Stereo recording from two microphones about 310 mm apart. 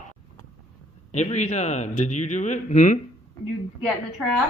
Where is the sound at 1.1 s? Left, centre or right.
Left.